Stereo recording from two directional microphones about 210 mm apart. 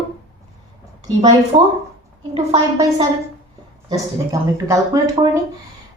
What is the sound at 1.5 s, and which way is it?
Speech, 25° right (ahead or behind).